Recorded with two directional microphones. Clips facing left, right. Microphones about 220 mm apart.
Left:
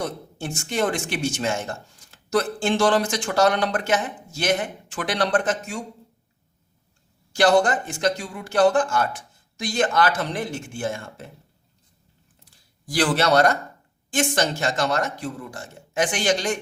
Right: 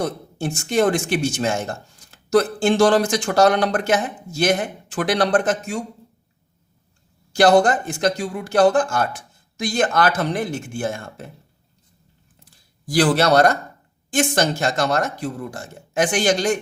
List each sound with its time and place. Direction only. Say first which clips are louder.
0.0 s speech: right 5 dB; 40° right (ahead or behind)
7.3 s speech: right 4 dB; 40° right (ahead or behind)
12.9 s speech: right 4 dB; 40° right (ahead or behind)